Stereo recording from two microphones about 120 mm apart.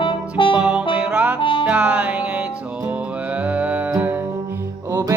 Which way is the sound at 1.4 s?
45° left (ahead or behind).